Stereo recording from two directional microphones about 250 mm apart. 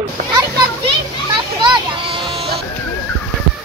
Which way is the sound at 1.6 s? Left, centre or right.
Centre.